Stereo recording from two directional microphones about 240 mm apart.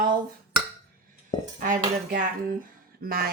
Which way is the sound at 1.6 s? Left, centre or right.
Right.